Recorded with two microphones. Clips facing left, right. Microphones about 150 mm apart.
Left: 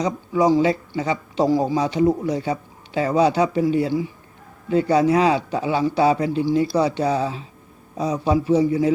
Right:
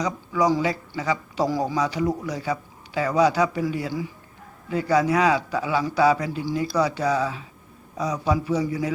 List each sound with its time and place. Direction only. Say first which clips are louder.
0.0 s speech: left 4 dB; 25° left (ahead or behind)